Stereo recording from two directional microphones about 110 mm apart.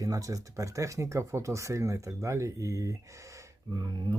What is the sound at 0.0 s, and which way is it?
Speech, 30° right (ahead or behind).